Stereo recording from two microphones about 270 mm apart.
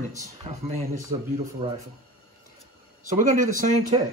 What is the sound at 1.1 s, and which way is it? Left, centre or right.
Speech, centre.